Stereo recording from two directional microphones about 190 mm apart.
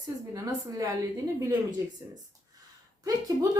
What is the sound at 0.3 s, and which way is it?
Speech, 15° right (ahead or behind).